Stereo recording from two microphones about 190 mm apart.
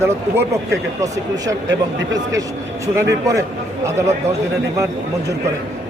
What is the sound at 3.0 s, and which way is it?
Speech, 15° right (ahead or behind).